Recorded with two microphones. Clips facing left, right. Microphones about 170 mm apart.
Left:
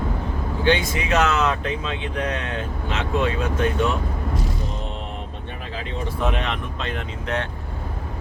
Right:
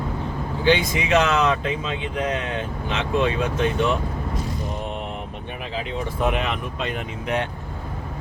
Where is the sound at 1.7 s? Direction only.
5° right (ahead or behind).